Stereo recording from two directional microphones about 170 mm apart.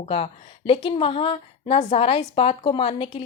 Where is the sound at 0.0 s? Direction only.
35° left (ahead or behind).